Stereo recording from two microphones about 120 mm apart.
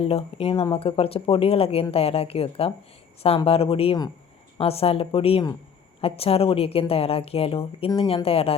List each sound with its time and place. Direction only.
0.0 s a woman's voice: 55° left (ahead or behind)